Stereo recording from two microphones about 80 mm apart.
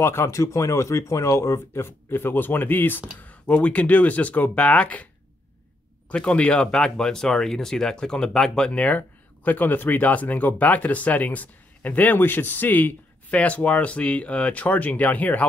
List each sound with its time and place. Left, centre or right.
0.0 s speech: left; by 5.0 s centre
6.0 s speech: centre